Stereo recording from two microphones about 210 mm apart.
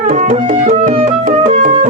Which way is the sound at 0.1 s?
40° right (ahead or behind).